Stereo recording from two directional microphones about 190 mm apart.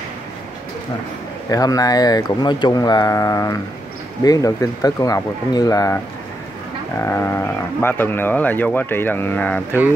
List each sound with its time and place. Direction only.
1.5 s speech: 20° left (ahead or behind)
7.0 s speech: 10° left (ahead or behind)